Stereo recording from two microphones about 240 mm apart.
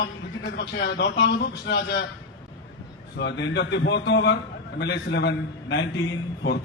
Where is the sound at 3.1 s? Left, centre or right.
Left.